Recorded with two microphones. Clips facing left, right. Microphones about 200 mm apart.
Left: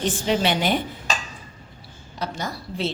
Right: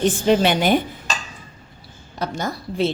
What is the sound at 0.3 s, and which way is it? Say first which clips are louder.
Speech: right 5 dB; 50° right (ahead or behind).